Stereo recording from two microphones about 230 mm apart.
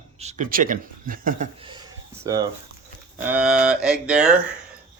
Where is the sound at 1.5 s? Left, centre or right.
Right; by 4.3 s centre.